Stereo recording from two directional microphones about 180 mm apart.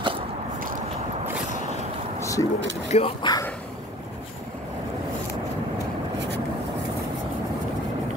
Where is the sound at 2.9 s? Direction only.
30° left (ahead or behind).